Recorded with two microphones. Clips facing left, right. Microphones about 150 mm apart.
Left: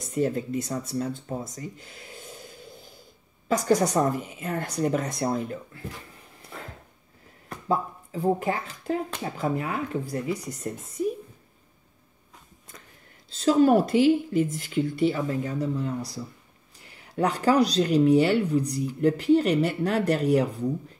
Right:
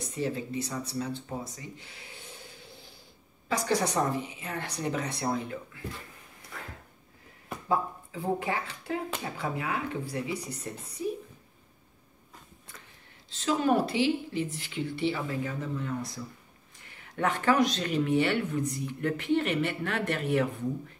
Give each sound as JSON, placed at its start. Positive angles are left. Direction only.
{"t": 0.1, "sound": "speech", "side_deg": 45}
{"t": 8.1, "sound": "speech", "side_deg": 40}
{"t": 13.3, "sound": "speech", "side_deg": 40}